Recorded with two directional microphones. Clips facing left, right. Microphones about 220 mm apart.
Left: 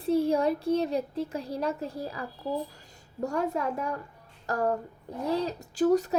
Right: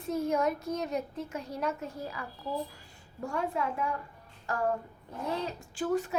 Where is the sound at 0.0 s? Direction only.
30° left (ahead or behind).